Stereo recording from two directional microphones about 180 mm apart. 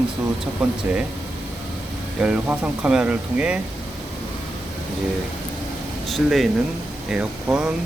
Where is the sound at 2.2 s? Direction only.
5° right (ahead or behind).